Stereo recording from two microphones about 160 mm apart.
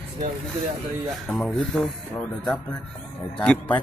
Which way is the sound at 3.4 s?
10° left (ahead or behind).